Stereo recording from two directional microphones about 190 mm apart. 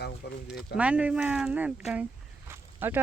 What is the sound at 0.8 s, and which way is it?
A woman's voice, 5° right (ahead or behind).